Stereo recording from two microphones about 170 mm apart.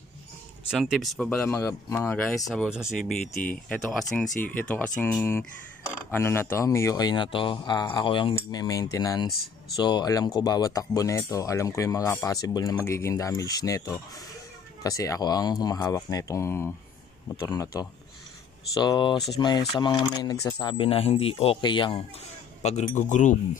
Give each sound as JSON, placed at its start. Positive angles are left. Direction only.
{"t": 0.7, "sound": "speech", "side_deg": 0}
{"t": 1.5, "sound": "speech", "side_deg": 20}
{"t": 22.6, "sound": "speech", "side_deg": 40}